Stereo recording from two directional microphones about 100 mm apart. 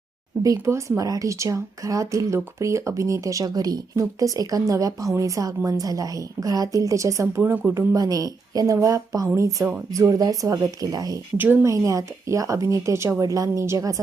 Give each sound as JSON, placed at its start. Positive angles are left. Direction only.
{"t": 0.6, "sound": "speech", "side_deg": -30}
{"t": 11.3, "sound": "a woman's voice", "side_deg": -20}
{"t": 11.6, "sound": "speech", "side_deg": -35}